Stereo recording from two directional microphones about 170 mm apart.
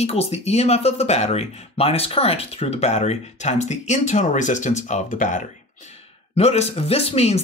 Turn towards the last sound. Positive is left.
turn(degrees=40)  # may be behind; listen again after turning